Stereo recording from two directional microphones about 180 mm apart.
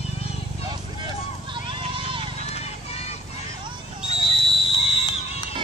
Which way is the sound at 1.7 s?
30° right (ahead or behind).